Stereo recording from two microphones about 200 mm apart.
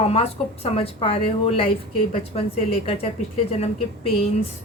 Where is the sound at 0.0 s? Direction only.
30° left (ahead or behind).